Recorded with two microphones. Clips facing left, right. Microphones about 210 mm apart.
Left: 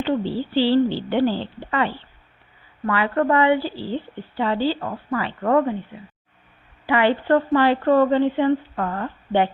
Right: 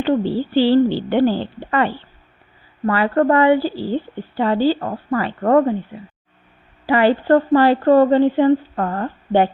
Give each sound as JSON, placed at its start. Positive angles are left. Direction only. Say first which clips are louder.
{"t": 0.5, "sound": "a woman's voice", "louder": "right 4 dB", "side_deg": -50}
{"t": 6.8, "sound": "speech", "louder": "right 4 dB", "side_deg": -35}